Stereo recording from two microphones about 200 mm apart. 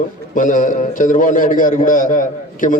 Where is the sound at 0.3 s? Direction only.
40° left (ahead or behind).